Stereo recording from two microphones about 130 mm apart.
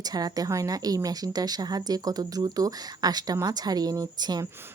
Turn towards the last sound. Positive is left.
turn(degrees=-30)  # may be behind; listen again after turning